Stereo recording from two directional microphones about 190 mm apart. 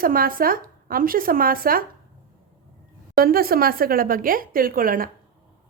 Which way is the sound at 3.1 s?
50° right (ahead or behind).